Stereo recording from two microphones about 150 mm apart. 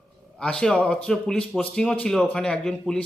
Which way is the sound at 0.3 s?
5° left (ahead or behind).